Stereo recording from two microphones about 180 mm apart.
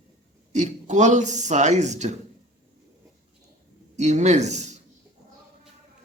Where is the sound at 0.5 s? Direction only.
40° right (ahead or behind).